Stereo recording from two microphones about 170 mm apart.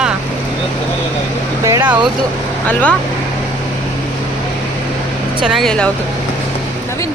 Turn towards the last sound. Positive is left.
turn(degrees=5)  # may be behind; listen again after turning